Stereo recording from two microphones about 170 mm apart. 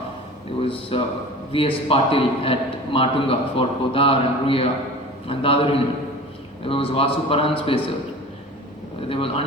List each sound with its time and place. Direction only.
0.6 s a man's voice: 30° left (ahead or behind)
6.7 s a man's voice: 35° left (ahead or behind)
9.0 s a man's voice: 35° left (ahead or behind)